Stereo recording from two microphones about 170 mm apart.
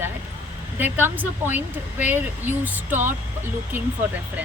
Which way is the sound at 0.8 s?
10° right (ahead or behind).